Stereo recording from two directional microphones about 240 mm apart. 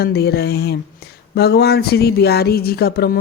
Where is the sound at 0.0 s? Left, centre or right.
Left.